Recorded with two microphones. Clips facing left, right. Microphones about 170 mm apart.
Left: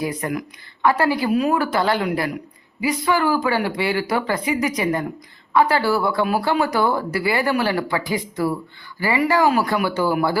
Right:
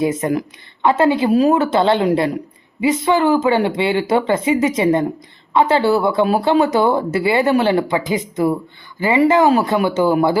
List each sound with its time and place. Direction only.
0.0 s speech: 25° right (ahead or behind)